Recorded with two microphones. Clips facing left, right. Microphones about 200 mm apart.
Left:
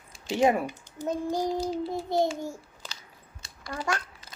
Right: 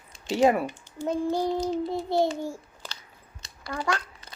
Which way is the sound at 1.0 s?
40° left (ahead or behind).